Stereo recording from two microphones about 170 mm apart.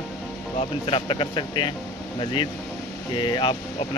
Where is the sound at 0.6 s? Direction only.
30° left (ahead or behind).